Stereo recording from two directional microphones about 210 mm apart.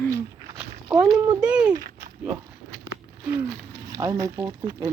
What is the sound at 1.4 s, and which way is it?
Speech, 5° right (ahead or behind).